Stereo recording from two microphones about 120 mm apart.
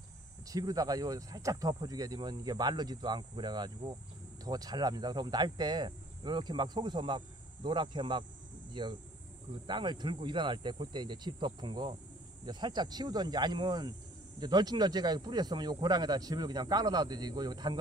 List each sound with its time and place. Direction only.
0.5 s speech: 30° right (ahead or behind)